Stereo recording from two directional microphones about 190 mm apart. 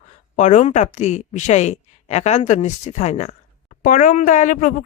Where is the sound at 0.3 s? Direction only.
40° left (ahead or behind).